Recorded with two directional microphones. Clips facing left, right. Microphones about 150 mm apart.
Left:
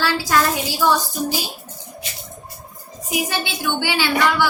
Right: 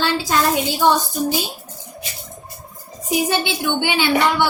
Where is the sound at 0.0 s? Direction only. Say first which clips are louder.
Even; 20° right (ahead or behind).